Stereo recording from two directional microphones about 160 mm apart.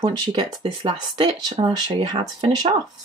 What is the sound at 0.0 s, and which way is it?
Speech, 30° right (ahead or behind).